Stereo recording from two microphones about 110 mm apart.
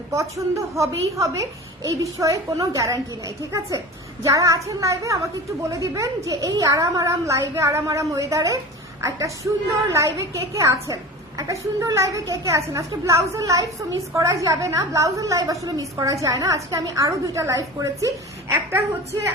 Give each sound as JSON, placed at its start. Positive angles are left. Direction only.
{"t": 0.1, "sound": "a woman's voice", "side_deg": -30}